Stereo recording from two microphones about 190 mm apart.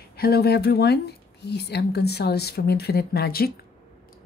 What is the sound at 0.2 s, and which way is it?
Speech, 55° left (ahead or behind).